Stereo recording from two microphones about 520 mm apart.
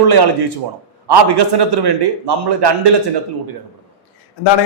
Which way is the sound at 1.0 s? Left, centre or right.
Right.